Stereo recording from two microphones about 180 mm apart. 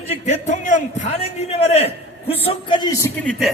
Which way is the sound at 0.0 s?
35° left (ahead or behind).